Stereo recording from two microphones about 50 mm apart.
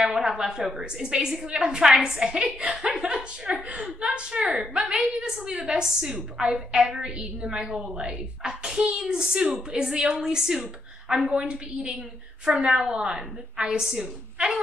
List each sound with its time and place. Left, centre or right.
0.0 s a woman's voice: centre
11.2 s a woman's voice: centre
13.7 s a woman's voice: centre